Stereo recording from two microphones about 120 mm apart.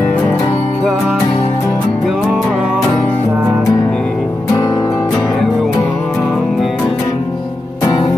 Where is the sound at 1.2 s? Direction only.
40° left (ahead or behind).